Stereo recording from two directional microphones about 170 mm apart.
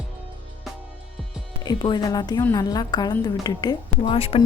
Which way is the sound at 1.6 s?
25° left (ahead or behind).